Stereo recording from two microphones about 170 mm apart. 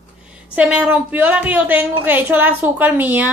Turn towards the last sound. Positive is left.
turn(degrees=-10)  # may be behind; listen again after turning